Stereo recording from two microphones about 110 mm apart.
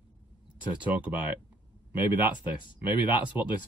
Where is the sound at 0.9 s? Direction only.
15° right (ahead or behind).